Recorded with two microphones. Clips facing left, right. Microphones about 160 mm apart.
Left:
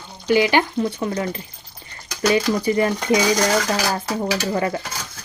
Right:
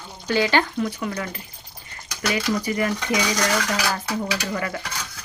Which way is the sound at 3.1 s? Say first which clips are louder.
Left 6 dB; 30° left (ahead or behind).